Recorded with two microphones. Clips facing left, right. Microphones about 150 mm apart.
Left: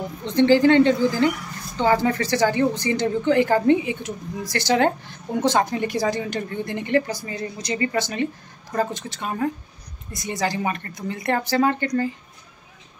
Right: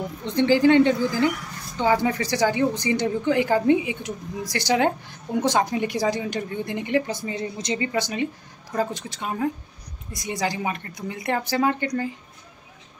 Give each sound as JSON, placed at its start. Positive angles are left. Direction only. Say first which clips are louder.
{"t": 0.2, "sound": "a woman's voice", "louder": "left 3 dB", "side_deg": -10}
{"t": 7.1, "sound": "speech", "louder": "right 1 dB", "side_deg": -25}
{"t": 7.9, "sound": "a woman's voice", "louder": "left 1 dB", "side_deg": -10}